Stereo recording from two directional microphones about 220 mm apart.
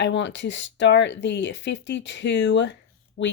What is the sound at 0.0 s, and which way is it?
Speech, 55° left (ahead or behind).